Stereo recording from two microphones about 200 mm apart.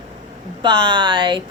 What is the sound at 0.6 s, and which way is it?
Speech, 25° right (ahead or behind).